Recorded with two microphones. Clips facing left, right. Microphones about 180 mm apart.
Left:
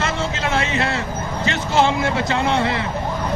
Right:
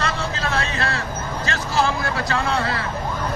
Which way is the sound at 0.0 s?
20° left (ahead or behind).